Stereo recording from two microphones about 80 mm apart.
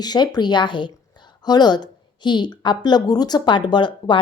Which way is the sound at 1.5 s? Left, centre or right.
Left.